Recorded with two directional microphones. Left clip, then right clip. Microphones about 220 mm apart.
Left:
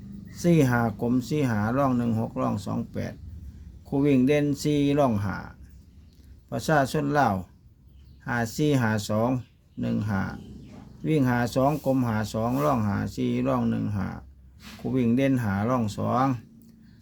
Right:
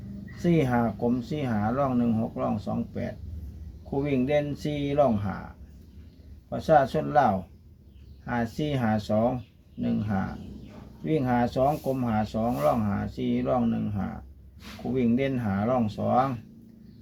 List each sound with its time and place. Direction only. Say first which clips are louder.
0.4 s speech: left 2 dB; 45° left (ahead or behind)
6.5 s speech: right 3 dB; 45° left (ahead or behind)